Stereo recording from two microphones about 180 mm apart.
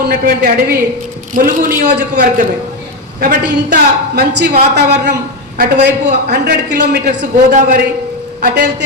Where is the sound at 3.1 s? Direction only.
60° right (ahead or behind).